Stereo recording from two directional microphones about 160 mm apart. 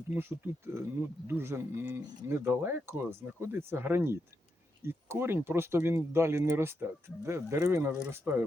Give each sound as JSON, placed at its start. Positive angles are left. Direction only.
{"t": 0.1, "sound": "speech", "side_deg": -15}